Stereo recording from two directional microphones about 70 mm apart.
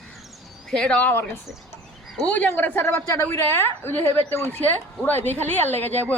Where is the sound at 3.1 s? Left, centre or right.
Left.